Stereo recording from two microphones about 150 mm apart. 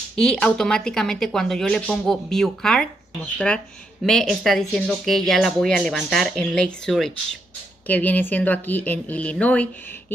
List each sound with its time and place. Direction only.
0.1 s a woman's voice: 5° left (ahead or behind)